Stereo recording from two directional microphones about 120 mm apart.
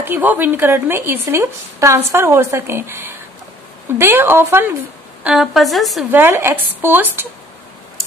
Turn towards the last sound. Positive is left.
turn(degrees=-15)  # may be behind; listen again after turning